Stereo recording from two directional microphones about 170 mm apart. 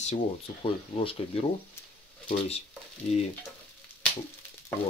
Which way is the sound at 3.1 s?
40° left (ahead or behind).